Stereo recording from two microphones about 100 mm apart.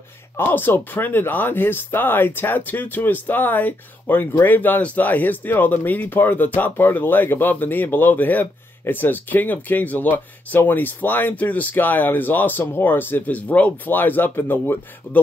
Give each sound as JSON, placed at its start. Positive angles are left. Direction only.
{"t": 0.4, "sound": "speech", "side_deg": 20}